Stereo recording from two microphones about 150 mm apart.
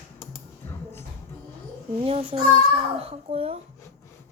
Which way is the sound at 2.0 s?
40° right (ahead or behind).